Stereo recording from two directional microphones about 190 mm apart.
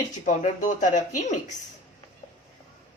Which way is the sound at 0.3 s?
40° left (ahead or behind).